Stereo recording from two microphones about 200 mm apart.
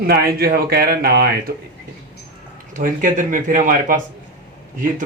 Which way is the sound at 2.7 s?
40° right (ahead or behind).